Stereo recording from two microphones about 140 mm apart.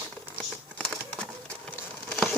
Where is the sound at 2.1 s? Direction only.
5° left (ahead or behind).